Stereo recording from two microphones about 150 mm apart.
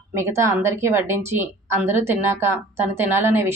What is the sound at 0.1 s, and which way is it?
A woman's voice, 15° right (ahead or behind).